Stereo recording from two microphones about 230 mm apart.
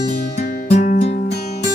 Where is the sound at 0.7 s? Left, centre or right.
Left.